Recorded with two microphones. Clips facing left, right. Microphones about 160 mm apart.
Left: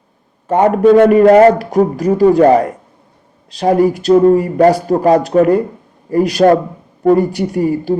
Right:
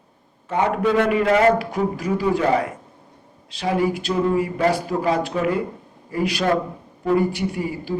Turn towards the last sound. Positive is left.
turn(degrees=45)  # may be behind; listen again after turning